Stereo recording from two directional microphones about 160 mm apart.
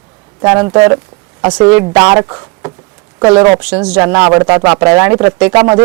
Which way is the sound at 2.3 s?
15° right (ahead or behind).